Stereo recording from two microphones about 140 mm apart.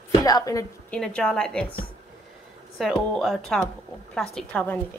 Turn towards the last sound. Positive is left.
turn(degrees=10)  # may be behind; listen again after turning